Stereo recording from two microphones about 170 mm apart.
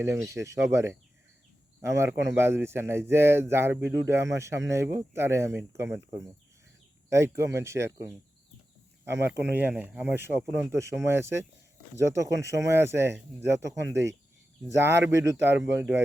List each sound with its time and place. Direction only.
0.0 s speech: 15° right (ahead or behind)
9.2 s speech: 10° right (ahead or behind)